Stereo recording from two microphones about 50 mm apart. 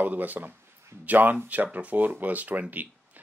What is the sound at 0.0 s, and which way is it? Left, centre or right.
Speech, right.